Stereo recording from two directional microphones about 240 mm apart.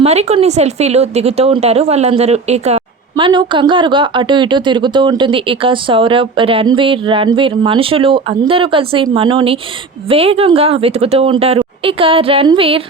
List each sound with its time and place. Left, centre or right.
0.0 s a woman's voice: right